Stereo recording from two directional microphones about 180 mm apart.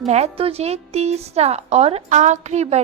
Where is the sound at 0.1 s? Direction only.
35° right (ahead or behind).